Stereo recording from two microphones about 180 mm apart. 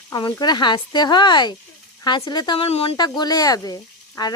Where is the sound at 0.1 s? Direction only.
20° left (ahead or behind).